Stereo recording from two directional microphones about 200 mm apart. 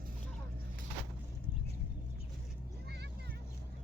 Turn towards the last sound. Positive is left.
turn(degrees=-55)  # may be behind; listen again after turning